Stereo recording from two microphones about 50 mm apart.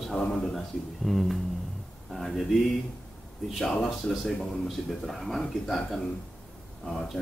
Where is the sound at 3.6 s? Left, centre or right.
Centre.